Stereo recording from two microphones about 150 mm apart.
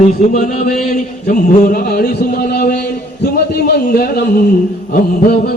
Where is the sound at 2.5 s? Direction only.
90° left.